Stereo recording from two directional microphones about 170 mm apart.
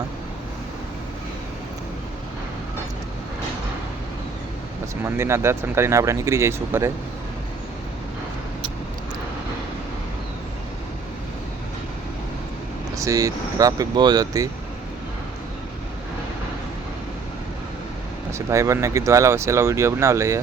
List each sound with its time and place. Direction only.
5.0 s speech: 15° right (ahead or behind)
13.0 s speech: 20° right (ahead or behind)
18.3 s speech: 15° right (ahead or behind)